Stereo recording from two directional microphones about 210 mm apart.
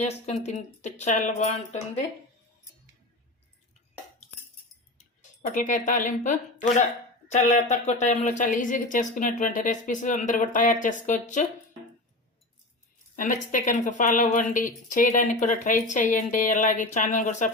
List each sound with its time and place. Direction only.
0.0 s speech: 30° left (ahead or behind)
4.9 s speech: 40° left (ahead or behind)
13.1 s speech: 40° left (ahead or behind)